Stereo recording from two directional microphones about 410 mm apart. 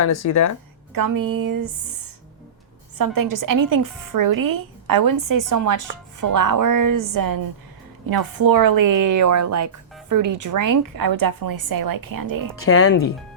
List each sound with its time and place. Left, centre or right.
0.3 s speech: left
0.9 s a woman's voice: right
3.0 s a woman's voice: right
12.6 s speech: left